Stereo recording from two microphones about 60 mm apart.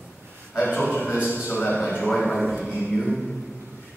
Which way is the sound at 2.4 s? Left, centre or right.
Centre.